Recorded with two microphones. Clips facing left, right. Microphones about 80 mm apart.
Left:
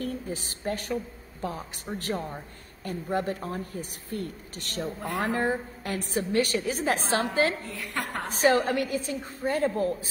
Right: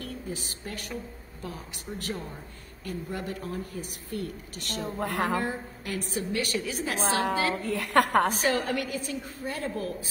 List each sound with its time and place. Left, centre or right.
0.0 s a woman's voice: left
4.9 s a woman's voice: right
5.3 s a woman's voice: left
7.6 s a woman's voice: right
8.4 s a woman's voice: left